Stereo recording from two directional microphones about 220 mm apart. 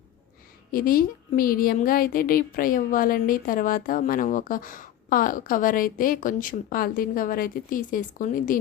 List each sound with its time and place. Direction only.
0.7 s a woman's voice: 40° left (ahead or behind)